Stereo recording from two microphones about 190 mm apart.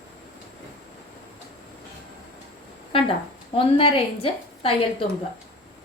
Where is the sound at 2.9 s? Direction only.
30° left (ahead or behind).